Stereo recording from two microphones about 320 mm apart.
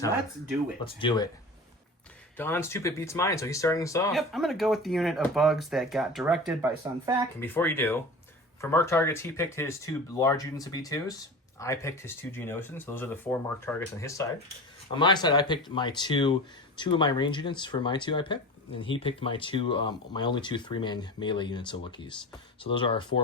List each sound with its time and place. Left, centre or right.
0.9 s speech: centre
2.4 s speech: centre
7.3 s speech: centre